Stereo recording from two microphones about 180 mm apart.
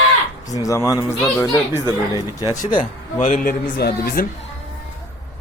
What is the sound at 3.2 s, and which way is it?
A man's voice, 50° left (ahead or behind).